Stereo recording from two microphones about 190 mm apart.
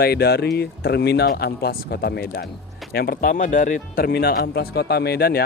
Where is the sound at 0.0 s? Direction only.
55° left (ahead or behind).